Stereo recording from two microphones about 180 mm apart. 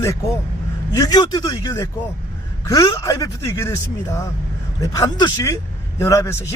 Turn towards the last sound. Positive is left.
turn(degrees=15)  # may be behind; listen again after turning